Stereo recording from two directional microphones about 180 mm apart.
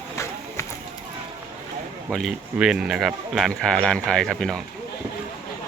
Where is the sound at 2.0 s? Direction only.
Centre (ahead or behind).